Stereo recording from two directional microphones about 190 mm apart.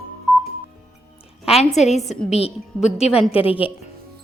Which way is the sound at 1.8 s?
35° left (ahead or behind).